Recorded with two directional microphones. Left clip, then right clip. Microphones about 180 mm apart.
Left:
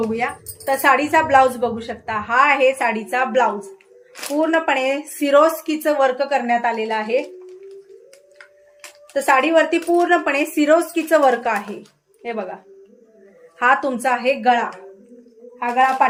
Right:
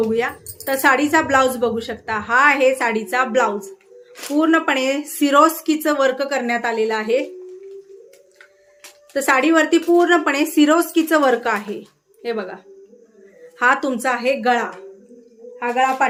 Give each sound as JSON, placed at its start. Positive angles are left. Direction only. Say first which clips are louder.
{"t": 0.1, "sound": "a woman's voice", "louder": "right 2 dB", "side_deg": -20}
{"t": 9.1, "sound": "a woman's voice", "louder": "left 1 dB", "side_deg": -20}
{"t": 13.6, "sound": "a woman's voice", "louder": "even", "side_deg": -25}